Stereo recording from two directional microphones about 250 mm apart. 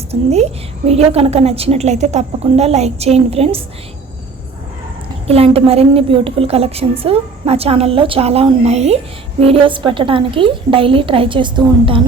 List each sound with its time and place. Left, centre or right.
0.1 s a woman's voice: right
5.3 s a woman's voice: right